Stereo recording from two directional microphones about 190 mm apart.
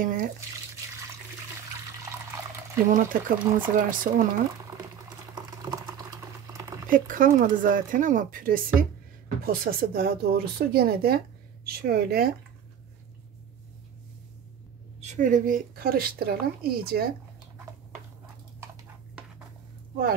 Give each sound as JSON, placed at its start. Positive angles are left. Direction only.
{"t": 0.0, "sound": "drip", "side_deg": -45}
{"t": 2.9, "sound": "speech", "side_deg": -45}
{"t": 5.3, "sound": "boiling", "side_deg": -20}
{"t": 6.9, "sound": "speech", "side_deg": -45}
{"t": 15.0, "sound": "speech", "side_deg": -40}